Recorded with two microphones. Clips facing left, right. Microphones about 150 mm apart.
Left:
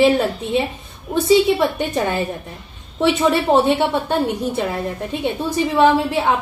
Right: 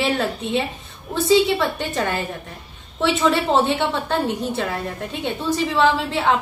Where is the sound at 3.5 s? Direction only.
15° left (ahead or behind).